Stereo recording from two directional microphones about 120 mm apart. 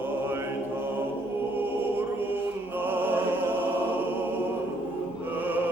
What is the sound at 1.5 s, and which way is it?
Music, 15° right (ahead or behind).